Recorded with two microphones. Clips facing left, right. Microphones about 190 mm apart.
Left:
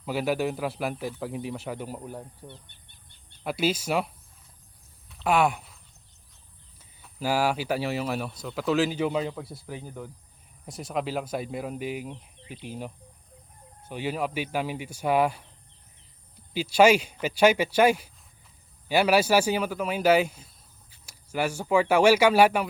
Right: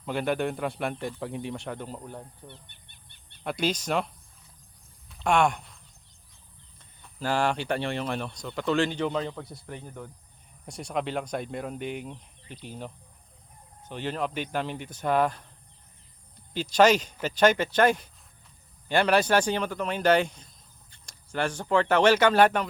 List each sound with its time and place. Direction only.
0.0 s speech: 5° left (ahead or behind)
2.6 s bird: 60° right (ahead or behind)
3.4 s speech: 5° left (ahead or behind)
5.0 s a sound: centre (ahead or behind)
6.7 s speech: 5° left (ahead or behind)
16.5 s speech: 10° left (ahead or behind)